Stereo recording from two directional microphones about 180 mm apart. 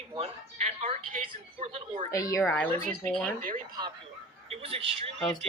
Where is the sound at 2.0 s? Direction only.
15° left (ahead or behind).